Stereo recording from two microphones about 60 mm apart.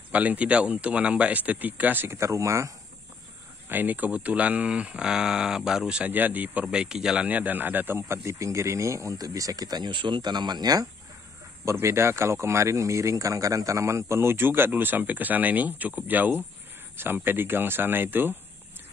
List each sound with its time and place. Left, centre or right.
0.1 s speech: right
2.0 s speech: right
2.3 s speech: right
3.6 s speech: right; by 6.0 s centre
6.0 s speech: right; by 7.2 s centre
7.2 s speech: right
10.0 s speech: right
10.6 s speech: right
11.7 s speech: right